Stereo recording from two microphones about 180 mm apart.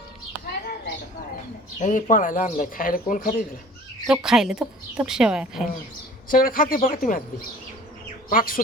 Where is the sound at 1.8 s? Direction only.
50° left (ahead or behind).